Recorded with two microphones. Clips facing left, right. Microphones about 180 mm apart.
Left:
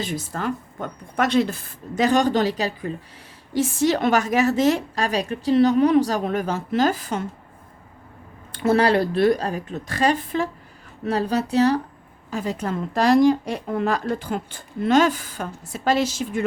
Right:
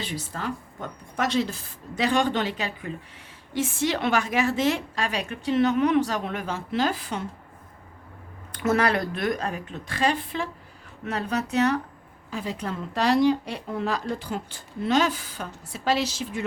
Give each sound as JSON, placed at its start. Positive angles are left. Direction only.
{"t": 0.0, "sound": "a woman's voice", "side_deg": 50}
{"t": 8.5, "sound": "a woman's voice", "side_deg": 30}
{"t": 12.3, "sound": "a woman's voice", "side_deg": 45}